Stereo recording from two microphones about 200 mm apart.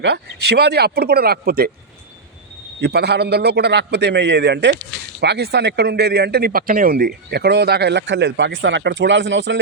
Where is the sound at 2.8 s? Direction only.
55° right (ahead or behind).